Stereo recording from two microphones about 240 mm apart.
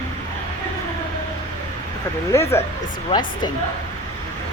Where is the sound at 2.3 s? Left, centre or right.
Centre.